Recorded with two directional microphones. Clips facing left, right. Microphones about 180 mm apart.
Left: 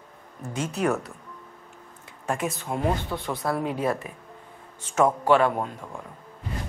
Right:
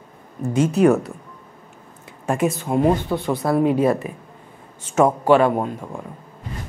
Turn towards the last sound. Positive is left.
turn(degrees=-20)  # may be behind; listen again after turning